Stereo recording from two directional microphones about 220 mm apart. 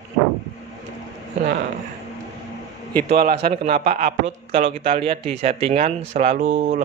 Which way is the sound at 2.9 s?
40° right (ahead or behind).